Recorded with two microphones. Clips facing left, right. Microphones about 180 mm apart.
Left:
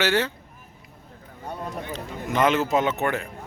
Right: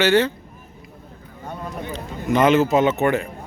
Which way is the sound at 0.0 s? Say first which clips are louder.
Right 6 dB; 5° left (ahead or behind).